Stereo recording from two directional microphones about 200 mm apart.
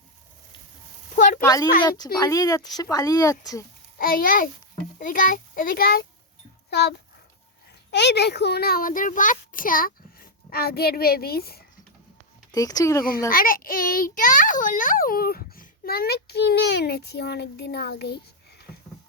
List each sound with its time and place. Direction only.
1.1 s a sound: 40° left (ahead or behind)
1.4 s speech: 20° left (ahead or behind)
3.9 s a child's voice: 45° left (ahead or behind)
12.5 s speech: 20° left (ahead or behind)
13.3 s a child's voice: 45° left (ahead or behind)